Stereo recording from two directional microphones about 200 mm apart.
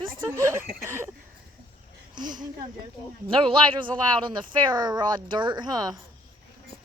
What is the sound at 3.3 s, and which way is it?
Speech, 25° right (ahead or behind).